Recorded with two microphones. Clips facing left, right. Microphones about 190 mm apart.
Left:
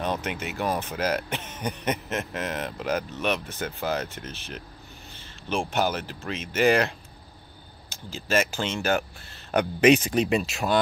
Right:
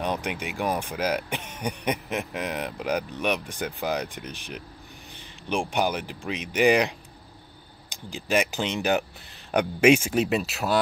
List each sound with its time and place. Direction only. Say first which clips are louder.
0.0 s speech: even; 10° right (ahead or behind)